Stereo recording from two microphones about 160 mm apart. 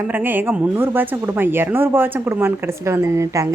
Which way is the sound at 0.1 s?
10° right (ahead or behind).